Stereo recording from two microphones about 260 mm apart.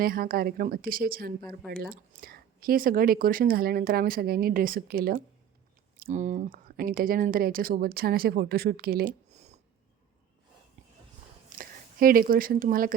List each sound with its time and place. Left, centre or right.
0.0 s speech: right
11.4 s speech: right